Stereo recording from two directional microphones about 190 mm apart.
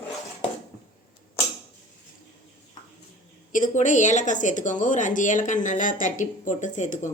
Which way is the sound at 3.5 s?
40° left (ahead or behind).